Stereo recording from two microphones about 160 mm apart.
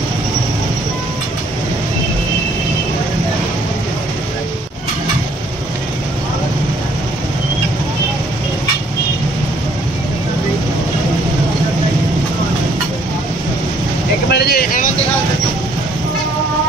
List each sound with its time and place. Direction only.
14.3 s vehicle: 75° left (ahead or behind)